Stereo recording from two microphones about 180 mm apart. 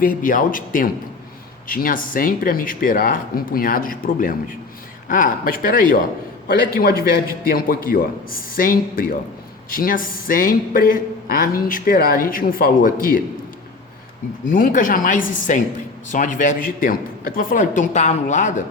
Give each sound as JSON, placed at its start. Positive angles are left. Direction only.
{"t": 0.0, "sound": "a man's voice", "side_deg": 50}
{"t": 14.5, "sound": "speech", "side_deg": 50}
{"t": 15.2, "sound": "a woman's voice", "side_deg": 90}
{"t": 16.0, "sound": "speech", "side_deg": 45}